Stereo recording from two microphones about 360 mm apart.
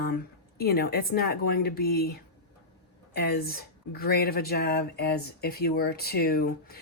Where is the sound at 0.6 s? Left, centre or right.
Left.